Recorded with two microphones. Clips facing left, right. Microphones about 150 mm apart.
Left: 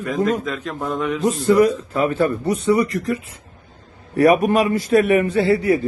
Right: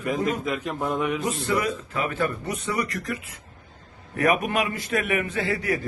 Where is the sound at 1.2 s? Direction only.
40° left (ahead or behind).